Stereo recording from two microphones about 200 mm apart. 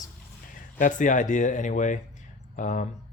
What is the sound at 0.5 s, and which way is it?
Speech, 40° left (ahead or behind).